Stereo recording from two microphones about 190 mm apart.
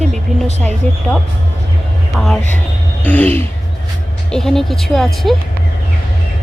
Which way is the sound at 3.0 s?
10° left (ahead or behind).